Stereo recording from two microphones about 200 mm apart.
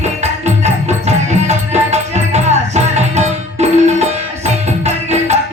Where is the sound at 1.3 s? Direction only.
35° right (ahead or behind).